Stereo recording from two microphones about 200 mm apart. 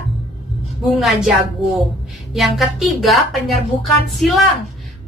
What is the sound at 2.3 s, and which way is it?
A woman's voice, centre (ahead or behind).